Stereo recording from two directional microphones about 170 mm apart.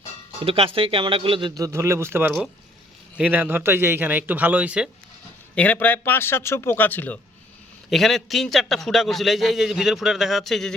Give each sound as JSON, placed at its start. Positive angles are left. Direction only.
{"t": 0.4, "sound": "a man's voice", "side_deg": -35}
{"t": 5.5, "sound": "a man's voice", "side_deg": 10}
{"t": 7.9, "sound": "a man's voice", "side_deg": 0}